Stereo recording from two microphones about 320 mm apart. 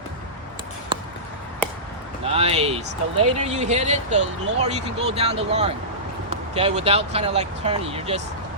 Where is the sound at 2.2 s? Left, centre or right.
Centre.